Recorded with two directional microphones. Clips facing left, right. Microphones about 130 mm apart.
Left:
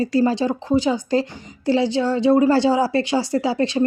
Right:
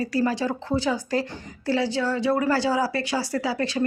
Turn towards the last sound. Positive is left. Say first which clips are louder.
# left 6 dB
turn(degrees=25)  # may be behind; listen again after turning